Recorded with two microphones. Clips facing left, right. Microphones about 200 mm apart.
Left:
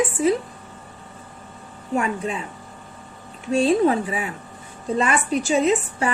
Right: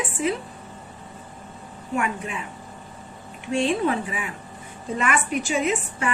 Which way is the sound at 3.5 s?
35° left (ahead or behind).